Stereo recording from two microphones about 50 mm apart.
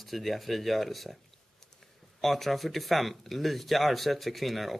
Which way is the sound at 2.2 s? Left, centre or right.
Centre.